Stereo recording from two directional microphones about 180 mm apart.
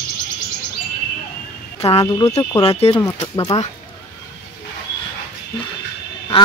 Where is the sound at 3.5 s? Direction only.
35° left (ahead or behind).